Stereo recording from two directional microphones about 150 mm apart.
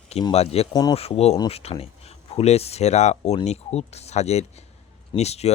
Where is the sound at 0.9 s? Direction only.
40° left (ahead or behind).